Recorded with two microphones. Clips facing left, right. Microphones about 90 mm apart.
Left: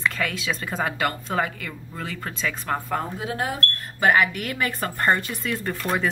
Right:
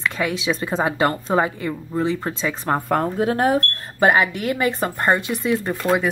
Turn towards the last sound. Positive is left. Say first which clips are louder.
# right 6 dB
turn(degrees=-15)  # may be behind; listen again after turning